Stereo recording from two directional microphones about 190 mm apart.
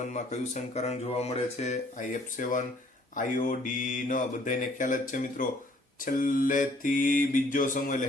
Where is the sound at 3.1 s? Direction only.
45° left (ahead or behind).